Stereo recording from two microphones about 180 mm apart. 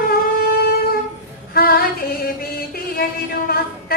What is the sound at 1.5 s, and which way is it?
Music, 55° left (ahead or behind).